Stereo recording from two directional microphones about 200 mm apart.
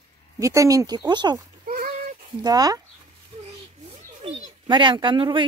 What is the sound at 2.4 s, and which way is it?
Speech, 20° right (ahead or behind).